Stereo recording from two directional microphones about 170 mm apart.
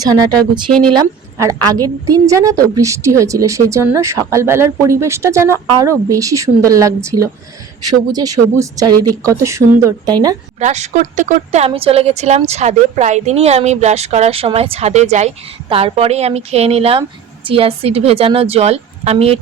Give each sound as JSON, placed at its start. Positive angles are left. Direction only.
{"t": 0.0, "sound": "speech", "side_deg": -25}
{"t": 0.7, "sound": "speech", "side_deg": 5}
{"t": 0.9, "sound": "a woman's voice", "side_deg": -20}
{"t": 10.6, "sound": "speech", "side_deg": -45}